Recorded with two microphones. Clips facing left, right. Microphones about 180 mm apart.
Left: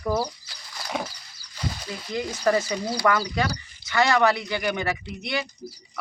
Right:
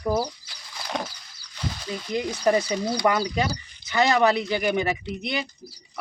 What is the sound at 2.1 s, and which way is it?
Speech, 15° right (ahead or behind).